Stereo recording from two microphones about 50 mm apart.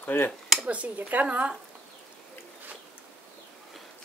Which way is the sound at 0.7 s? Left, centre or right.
Right.